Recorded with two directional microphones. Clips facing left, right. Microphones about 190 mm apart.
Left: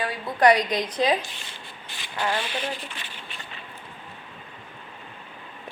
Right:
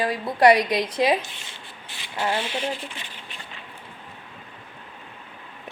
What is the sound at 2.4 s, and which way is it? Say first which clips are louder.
Speech: right 2 dB; 25° right (ahead or behind).